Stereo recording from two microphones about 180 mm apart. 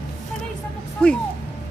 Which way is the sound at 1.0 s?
5° left (ahead or behind).